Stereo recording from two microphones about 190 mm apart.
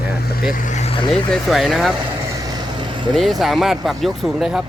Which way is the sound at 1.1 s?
Centre (ahead or behind).